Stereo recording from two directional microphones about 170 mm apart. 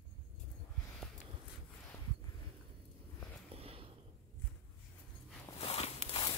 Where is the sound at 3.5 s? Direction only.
35° right (ahead or behind).